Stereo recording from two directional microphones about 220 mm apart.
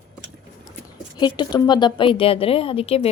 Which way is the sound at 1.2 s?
20° left (ahead or behind).